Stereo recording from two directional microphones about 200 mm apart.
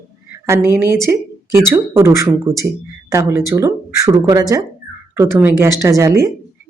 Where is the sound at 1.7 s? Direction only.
10° right (ahead or behind).